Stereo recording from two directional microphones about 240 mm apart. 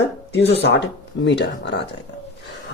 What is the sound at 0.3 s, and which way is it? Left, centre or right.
Speech, left.